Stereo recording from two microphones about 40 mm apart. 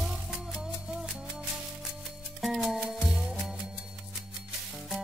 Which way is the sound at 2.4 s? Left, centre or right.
Centre.